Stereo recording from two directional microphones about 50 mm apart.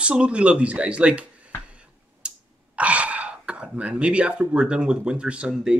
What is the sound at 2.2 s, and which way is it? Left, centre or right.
Gasp, right.